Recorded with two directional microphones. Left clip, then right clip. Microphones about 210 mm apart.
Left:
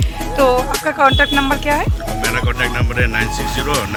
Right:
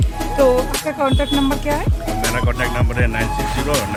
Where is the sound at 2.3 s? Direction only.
15° right (ahead or behind).